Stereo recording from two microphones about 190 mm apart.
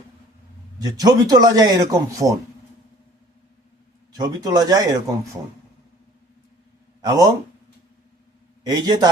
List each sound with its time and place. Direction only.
0.8 s speech: 20° right (ahead or behind)
4.2 s speech: 20° right (ahead or behind)
7.0 s speech: 20° right (ahead or behind)
8.6 s speech: 20° right (ahead or behind)